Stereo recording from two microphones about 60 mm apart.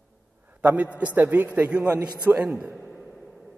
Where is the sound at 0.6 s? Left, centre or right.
Right.